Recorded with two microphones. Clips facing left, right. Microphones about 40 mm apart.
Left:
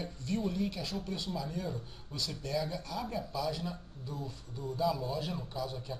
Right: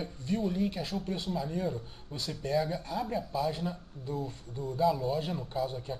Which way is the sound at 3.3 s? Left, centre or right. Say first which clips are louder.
Right 4 dB; right.